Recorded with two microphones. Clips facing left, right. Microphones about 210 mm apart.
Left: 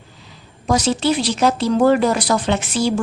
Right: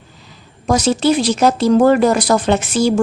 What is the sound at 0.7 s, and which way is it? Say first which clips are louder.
Speech: right 3 dB; 45° right (ahead or behind).